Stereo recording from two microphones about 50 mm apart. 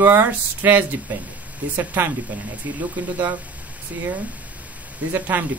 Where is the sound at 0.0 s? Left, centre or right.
Right.